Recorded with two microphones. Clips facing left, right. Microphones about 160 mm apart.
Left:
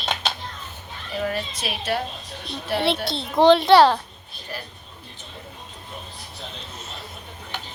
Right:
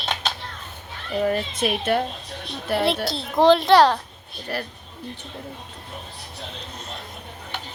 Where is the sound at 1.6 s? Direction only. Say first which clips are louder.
Right 6 dB; 50° right (ahead or behind).